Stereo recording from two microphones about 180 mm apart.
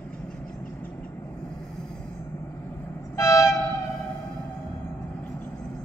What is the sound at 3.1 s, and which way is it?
Train, 15° left (ahead or behind).